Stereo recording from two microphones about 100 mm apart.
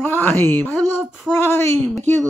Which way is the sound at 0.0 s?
20° left (ahead or behind).